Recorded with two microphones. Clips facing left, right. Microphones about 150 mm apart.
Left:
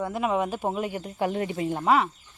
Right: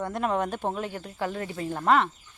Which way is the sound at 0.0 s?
5° left (ahead or behind).